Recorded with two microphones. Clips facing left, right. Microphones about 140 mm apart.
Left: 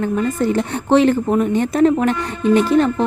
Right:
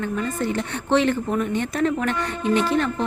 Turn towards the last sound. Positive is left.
turn(degrees=35)  # may be behind; listen again after turning